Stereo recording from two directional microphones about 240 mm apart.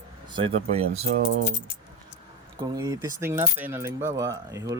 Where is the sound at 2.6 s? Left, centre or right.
Centre.